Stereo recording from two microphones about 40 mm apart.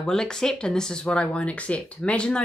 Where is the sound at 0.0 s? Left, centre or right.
Centre.